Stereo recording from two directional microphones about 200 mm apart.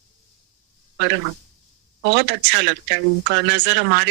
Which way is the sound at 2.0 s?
60° right (ahead or behind).